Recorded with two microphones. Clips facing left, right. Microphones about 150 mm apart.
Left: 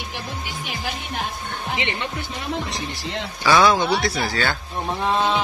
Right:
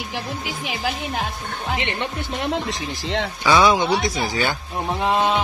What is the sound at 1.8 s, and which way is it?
Speech, 60° right (ahead or behind).